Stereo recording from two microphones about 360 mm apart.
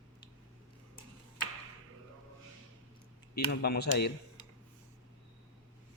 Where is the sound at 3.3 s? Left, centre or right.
Left.